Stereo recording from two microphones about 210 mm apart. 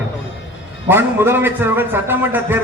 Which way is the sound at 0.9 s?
10° right (ahead or behind).